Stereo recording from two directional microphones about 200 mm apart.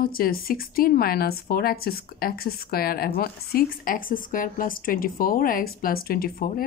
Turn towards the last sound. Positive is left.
turn(degrees=45)  # may be behind; listen again after turning